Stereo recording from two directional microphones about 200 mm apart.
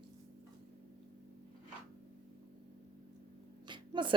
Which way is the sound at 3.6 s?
25° right (ahead or behind).